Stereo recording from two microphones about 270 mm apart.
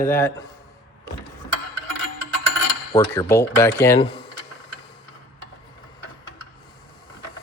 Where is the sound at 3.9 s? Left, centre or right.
Centre.